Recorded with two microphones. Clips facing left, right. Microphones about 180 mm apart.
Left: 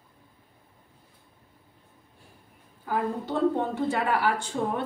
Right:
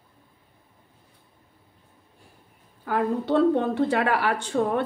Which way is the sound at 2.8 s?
70° right (ahead or behind).